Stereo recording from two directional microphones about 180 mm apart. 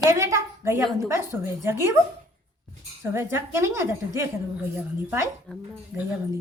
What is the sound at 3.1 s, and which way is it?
A woman's voice, 15° right (ahead or behind).